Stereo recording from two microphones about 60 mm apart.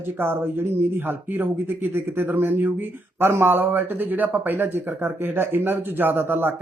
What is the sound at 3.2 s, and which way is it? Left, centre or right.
Speech, right.